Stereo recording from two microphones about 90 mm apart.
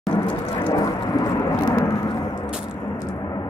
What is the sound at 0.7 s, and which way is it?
Vehicle, 45° left (ahead or behind).